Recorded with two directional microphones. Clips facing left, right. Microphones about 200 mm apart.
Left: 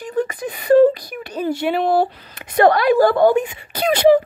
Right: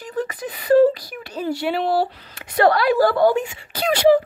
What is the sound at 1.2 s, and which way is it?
Speech, 20° left (ahead or behind).